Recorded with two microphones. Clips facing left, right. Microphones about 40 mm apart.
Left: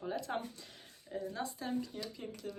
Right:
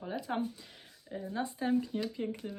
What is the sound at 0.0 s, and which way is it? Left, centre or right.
Speech, centre.